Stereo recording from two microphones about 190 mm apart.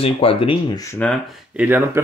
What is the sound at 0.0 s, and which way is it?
Speech, 30° left (ahead or behind).